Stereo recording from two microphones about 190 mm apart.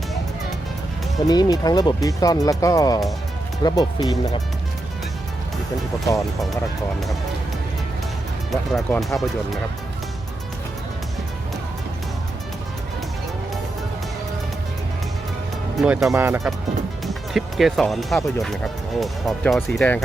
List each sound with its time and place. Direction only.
1.2 s speech: 20° left (ahead or behind)
8.7 s speech: centre (ahead or behind)
15.8 s speech: centre (ahead or behind)
16.1 s speech: 10° right (ahead or behind)
17.1 s speech: centre (ahead or behind)